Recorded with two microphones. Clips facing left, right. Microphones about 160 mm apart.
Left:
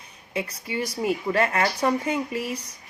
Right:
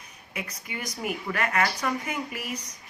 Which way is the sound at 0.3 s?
30° left (ahead or behind).